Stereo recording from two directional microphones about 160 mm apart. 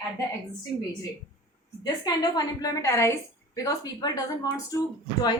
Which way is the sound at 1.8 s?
25° left (ahead or behind).